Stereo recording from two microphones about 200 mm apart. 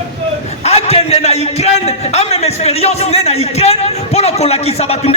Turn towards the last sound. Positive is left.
turn(degrees=30)  # may be behind; listen again after turning